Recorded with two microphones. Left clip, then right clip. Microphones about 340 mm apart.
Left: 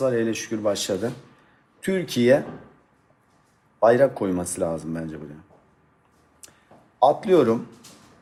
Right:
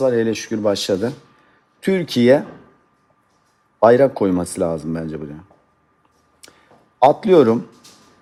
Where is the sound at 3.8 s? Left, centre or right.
Right.